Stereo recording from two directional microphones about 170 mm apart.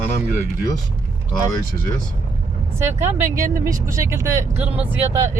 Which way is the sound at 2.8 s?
15° right (ahead or behind).